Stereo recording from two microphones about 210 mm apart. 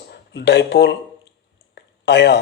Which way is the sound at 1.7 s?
55° left (ahead or behind).